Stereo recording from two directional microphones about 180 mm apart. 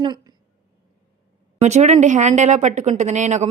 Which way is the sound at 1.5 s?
40° right (ahead or behind).